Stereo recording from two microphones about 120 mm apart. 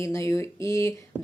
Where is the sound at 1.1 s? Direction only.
10° right (ahead or behind).